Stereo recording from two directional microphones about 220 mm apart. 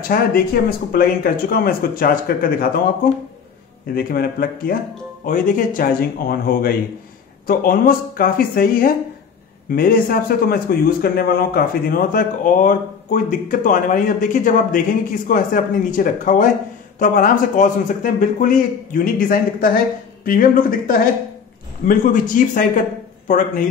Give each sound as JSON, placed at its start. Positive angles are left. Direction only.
{"t": 0.1, "sound": "speech", "side_deg": 40}
{"t": 3.8, "sound": "a man's voice", "side_deg": 40}